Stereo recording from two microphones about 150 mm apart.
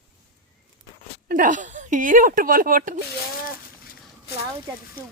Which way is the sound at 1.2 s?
60° right (ahead or behind).